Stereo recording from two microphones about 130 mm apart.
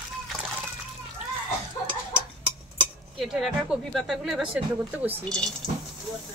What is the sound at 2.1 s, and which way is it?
Dishes, 10° right (ahead or behind).